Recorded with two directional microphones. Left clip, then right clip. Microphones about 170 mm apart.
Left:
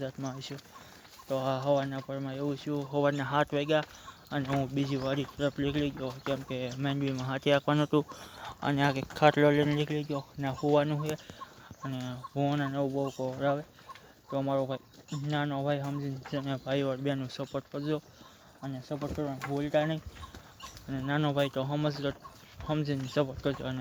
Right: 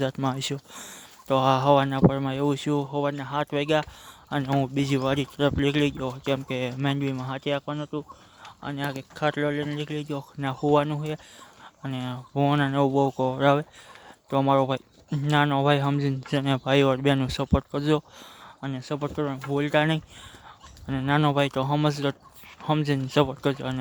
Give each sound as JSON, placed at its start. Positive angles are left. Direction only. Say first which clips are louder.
{"t": 0.0, "sound": "speech", "louder": "right 11 dB", "side_deg": -45}
{"t": 2.9, "sound": "speech", "louder": "right 1 dB", "side_deg": -15}
{"t": 3.5, "sound": "speech", "louder": "right 4 dB", "side_deg": -25}
{"t": 7.7, "sound": "speech", "louder": "left 4 dB", "side_deg": 5}
{"t": 10.1, "sound": "speech", "louder": "right 4 dB", "side_deg": -35}
{"t": 18.6, "sound": "speech", "louder": "right 7 dB", "side_deg": -55}